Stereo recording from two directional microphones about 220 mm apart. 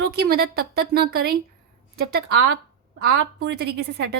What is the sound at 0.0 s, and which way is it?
A woman's voice, 45° right (ahead or behind).